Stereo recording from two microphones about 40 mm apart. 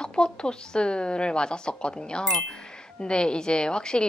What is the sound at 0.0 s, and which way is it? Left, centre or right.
Speech, left.